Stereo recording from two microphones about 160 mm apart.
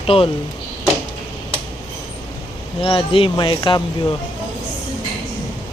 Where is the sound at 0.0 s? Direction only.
35° left (ahead or behind).